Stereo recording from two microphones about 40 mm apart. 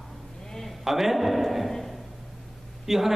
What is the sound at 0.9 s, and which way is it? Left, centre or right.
Speech, centre.